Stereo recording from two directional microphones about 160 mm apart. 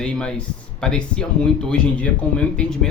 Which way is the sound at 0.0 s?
5° left (ahead or behind).